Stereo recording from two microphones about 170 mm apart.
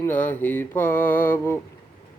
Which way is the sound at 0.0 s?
10° left (ahead or behind).